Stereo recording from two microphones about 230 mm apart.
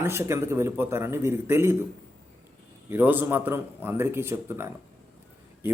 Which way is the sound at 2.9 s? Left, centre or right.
Centre.